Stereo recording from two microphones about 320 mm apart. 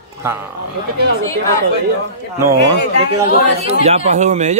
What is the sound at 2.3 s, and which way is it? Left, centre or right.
A man's voice, centre.